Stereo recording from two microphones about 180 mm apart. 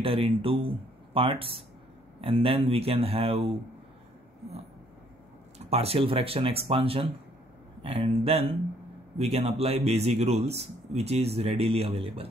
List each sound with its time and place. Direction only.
0.0 s speech: 30° right (ahead or behind)
5.7 s speech: 35° right (ahead or behind)